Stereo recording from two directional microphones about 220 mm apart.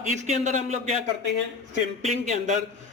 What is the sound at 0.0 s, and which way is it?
Speech, 35° right (ahead or behind).